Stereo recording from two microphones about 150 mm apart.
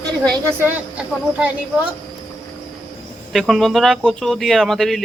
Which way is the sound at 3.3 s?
Centre (ahead or behind).